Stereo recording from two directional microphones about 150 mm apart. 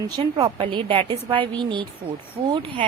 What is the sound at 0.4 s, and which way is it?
A woman's voice, 35° right (ahead or behind).